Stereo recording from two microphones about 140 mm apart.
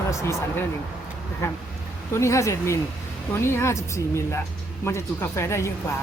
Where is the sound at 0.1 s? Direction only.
20° left (ahead or behind).